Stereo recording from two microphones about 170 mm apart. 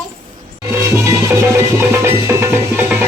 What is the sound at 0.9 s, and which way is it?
Music, 15° right (ahead or behind).